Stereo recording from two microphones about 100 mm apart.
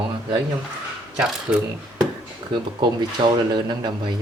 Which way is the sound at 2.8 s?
50° right (ahead or behind).